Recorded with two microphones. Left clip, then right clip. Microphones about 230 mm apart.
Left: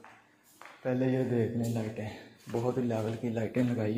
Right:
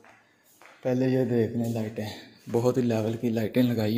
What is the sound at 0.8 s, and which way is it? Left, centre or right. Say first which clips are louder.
Speech: right 5 dB; right.